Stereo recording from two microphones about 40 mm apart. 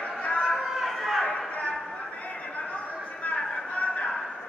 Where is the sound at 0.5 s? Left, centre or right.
Centre.